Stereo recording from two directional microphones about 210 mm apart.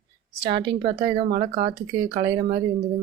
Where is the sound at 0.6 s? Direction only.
20° right (ahead or behind).